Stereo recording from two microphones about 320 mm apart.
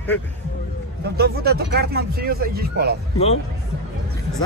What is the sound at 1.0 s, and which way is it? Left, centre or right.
Speech, right.